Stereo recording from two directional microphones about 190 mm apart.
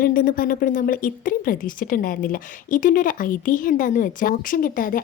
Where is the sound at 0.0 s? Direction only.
50° left (ahead or behind).